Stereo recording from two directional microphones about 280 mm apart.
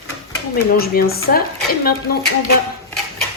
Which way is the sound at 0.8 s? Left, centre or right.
Left.